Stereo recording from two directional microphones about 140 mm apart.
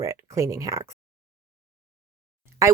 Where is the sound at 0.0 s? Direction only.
20° right (ahead or behind).